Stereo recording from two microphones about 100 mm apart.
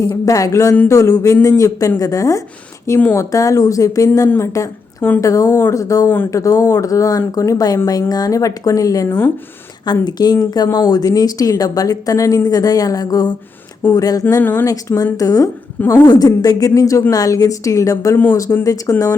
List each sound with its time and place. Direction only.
0.3 s speech: 35° left (ahead or behind)
3.0 s a woman's voice: 20° left (ahead or behind)
3.3 s speech: 35° left (ahead or behind)
9.0 s a woman's voice: 20° left (ahead or behind)
9.8 s speech: 45° left (ahead or behind)
14.4 s a woman's voice: 20° left (ahead or behind)
14.7 s speech: 30° left (ahead or behind)